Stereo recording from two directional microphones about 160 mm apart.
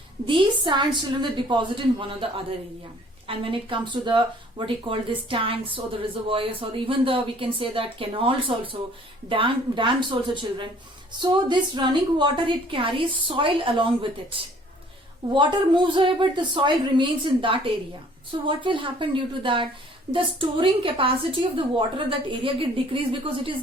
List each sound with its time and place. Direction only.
0.3 s speech: 30° right (ahead or behind)
3.2 s a woman's voice: 35° right (ahead or behind)